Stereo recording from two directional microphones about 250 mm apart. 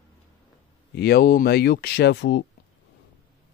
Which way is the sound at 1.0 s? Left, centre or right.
Left.